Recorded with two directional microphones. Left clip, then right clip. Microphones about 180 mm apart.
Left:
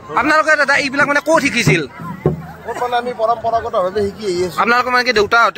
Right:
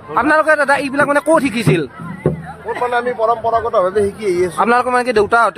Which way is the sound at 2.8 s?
5° right (ahead or behind).